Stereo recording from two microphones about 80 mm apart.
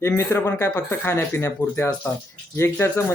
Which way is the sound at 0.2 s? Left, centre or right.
Left.